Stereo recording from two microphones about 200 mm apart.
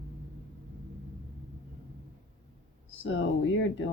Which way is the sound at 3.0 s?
70° left (ahead or behind).